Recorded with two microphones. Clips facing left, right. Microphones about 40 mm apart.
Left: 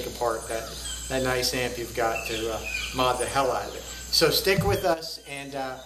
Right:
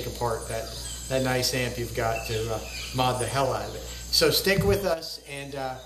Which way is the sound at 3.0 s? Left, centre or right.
Centre.